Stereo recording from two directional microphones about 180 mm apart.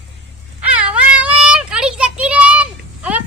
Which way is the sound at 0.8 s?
5° right (ahead or behind).